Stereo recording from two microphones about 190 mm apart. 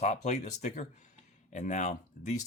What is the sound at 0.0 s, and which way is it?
Speech, 40° left (ahead or behind).